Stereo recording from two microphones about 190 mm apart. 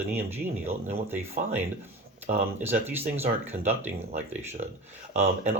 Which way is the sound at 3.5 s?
35° right (ahead or behind).